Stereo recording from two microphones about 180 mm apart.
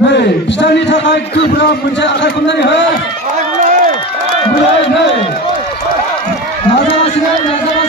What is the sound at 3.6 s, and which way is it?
Run, 45° right (ahead or behind).